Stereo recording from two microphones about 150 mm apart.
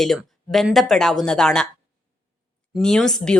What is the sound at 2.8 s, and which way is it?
Speech, 5° left (ahead or behind).